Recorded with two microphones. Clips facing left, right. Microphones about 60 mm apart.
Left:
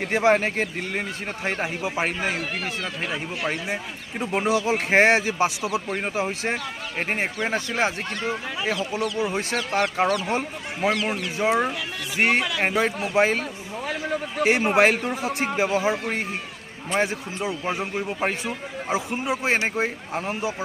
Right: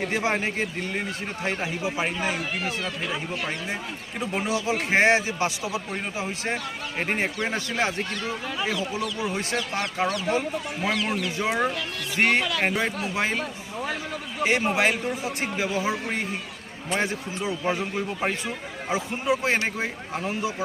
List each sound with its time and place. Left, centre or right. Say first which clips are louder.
0.0 s a man's voice: left 5 dB; left
1.5 s a man's voice: left 1 dB; left
4.4 s a man's voice: left 4 dB; left
7.0 s a man's voice: left 1 dB; centre
12.8 s a man's voice: left 5 dB; left
15.4 s a man's voice: left 7 dB; left